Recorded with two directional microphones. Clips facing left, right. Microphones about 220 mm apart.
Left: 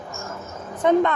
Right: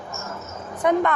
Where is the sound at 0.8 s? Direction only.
25° left (ahead or behind).